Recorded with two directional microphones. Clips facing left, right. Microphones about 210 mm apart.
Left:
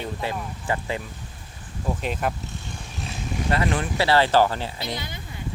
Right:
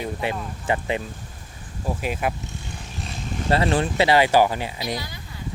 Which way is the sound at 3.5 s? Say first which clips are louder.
Right 4 dB; 30° right (ahead or behind).